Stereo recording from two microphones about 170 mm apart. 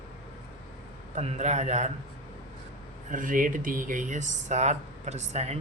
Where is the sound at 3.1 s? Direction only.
50° right (ahead or behind).